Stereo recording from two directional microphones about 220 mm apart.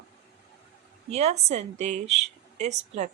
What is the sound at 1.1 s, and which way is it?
Speech, 30° right (ahead or behind).